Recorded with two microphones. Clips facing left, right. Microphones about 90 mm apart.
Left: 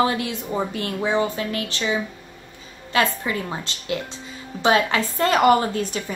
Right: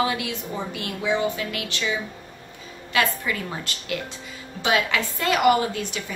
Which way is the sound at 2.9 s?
30° left (ahead or behind).